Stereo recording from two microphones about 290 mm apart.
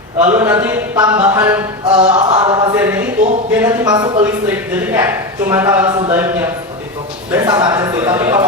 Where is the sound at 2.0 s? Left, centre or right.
Centre.